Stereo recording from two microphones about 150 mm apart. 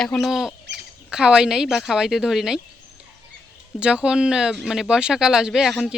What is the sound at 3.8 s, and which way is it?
Speech, 5° right (ahead or behind).